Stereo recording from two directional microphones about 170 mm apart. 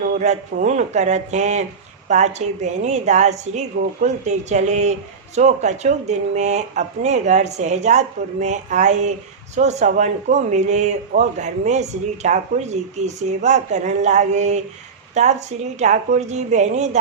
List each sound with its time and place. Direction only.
0.2 s speech: 45° right (ahead or behind)